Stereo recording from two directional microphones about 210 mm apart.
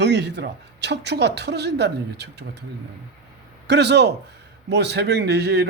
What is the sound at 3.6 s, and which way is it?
A man's voice, 55° right (ahead or behind).